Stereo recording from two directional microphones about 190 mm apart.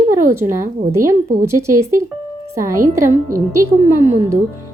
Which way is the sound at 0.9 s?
15° right (ahead or behind).